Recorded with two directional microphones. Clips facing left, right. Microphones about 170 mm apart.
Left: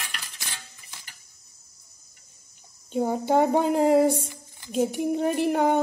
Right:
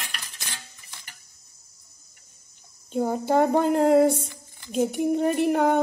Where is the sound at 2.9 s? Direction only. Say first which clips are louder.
Even; centre (ahead or behind).